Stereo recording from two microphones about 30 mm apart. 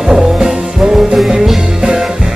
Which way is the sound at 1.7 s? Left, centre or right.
Right.